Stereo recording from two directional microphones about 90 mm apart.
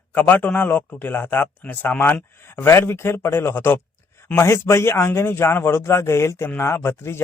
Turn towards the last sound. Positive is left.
turn(degrees=30)  # may be behind; listen again after turning